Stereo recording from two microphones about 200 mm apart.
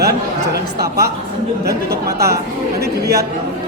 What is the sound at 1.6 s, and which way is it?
Speech, 50° right (ahead or behind).